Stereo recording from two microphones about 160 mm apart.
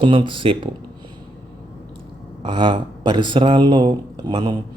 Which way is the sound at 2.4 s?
30° right (ahead or behind).